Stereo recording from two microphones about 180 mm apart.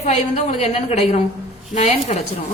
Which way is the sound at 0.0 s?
35° left (ahead or behind).